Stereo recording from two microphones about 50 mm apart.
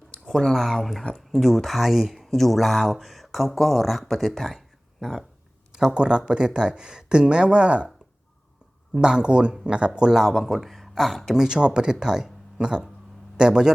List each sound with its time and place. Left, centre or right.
0.3 s speech: centre
5.9 s speech: centre
9.0 s speech: centre
11.3 s a man's voice: centre